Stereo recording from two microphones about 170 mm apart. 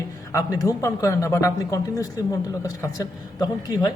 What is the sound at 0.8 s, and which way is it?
A woman's voice, 15° left (ahead or behind).